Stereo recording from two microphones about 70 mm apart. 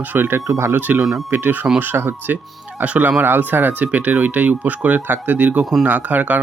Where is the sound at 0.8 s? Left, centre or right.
Right.